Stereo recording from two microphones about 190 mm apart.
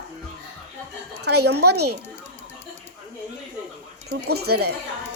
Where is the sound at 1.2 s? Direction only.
60° right (ahead or behind).